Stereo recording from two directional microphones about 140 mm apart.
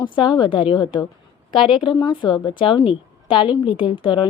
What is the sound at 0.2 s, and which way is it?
A woman's voice, 35° left (ahead or behind).